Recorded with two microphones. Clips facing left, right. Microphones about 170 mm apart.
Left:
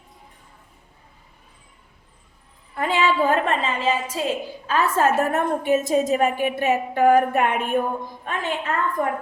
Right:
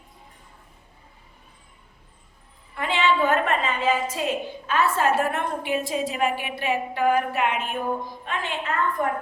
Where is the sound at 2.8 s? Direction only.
40° left (ahead or behind).